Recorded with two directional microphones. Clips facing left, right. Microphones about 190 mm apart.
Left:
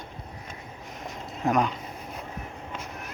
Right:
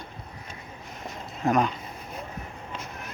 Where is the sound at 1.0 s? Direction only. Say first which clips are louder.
Right 1 dB; 15° left (ahead or behind).